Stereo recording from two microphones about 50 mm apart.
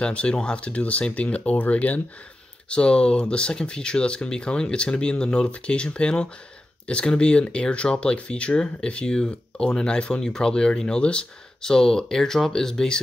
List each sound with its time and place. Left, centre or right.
0.0 s speech: left